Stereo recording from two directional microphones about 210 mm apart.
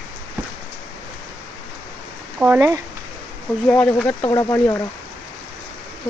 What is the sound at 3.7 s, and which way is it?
Speech, 5° left (ahead or behind).